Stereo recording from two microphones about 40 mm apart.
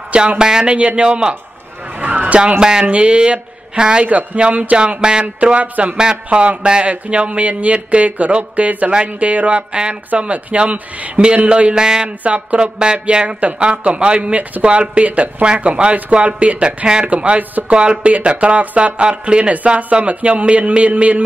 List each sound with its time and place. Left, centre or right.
0.4 s speech: centre
0.7 s speech: right
2.0 s music: right
2.6 s speech: centre
4.1 s speech: right
5.4 s speech: right
5.9 s speech: right
12.2 s speech: right
12.7 s speech: right